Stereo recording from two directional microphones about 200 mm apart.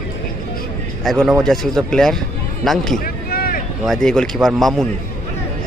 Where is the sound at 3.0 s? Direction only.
50° left (ahead or behind).